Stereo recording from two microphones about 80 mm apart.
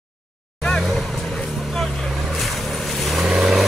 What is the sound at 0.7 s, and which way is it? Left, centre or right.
Vehicle, centre.